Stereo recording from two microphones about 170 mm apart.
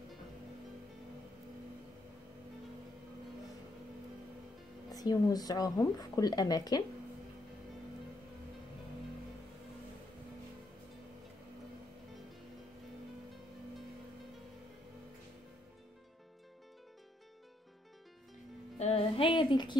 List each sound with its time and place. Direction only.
4.9 s a woman's voice: 20° left (ahead or behind)
18.8 s music: 35° left (ahead or behind)